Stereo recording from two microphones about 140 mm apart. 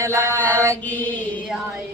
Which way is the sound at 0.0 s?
20° right (ahead or behind).